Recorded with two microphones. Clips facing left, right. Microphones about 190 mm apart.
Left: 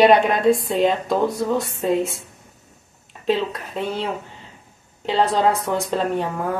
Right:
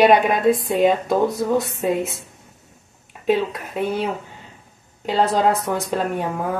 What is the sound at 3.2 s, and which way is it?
Speech, 10° right (ahead or behind).